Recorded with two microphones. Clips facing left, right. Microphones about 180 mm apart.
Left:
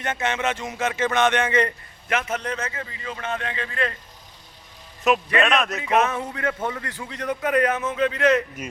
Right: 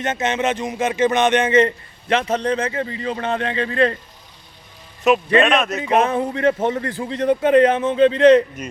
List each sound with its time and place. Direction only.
0.0 s speech: 20° right (ahead or behind)
5.1 s a man's voice: centre (ahead or behind)
5.8 s a man's voice: 30° right (ahead or behind)